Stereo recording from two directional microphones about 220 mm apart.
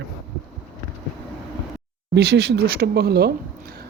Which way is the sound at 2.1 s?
50° right (ahead or behind).